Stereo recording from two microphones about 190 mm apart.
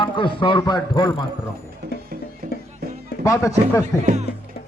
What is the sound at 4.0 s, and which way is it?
Speech, 35° right (ahead or behind).